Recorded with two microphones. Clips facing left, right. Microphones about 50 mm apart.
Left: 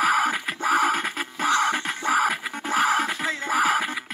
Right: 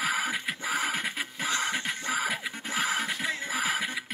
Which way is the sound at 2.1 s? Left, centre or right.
Left.